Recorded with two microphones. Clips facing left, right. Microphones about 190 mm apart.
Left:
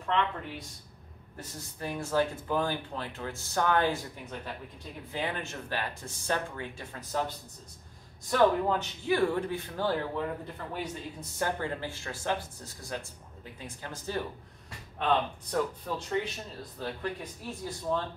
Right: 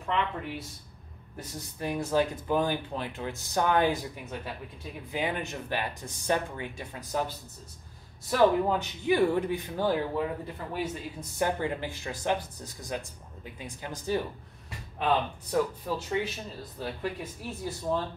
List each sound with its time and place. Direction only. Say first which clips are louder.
0.0 s speech: even; 5° right (ahead or behind)
8.3 s speech: right 1 dB; 5° right (ahead or behind)